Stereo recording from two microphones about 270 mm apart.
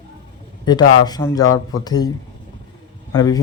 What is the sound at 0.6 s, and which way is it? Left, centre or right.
Speech, centre.